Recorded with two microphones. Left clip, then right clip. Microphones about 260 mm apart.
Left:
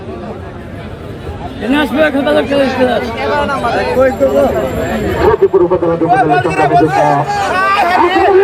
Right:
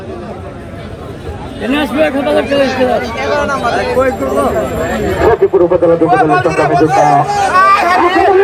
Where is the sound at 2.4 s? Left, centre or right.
Left.